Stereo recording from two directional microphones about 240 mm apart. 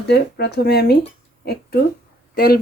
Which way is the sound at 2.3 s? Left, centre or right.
Left.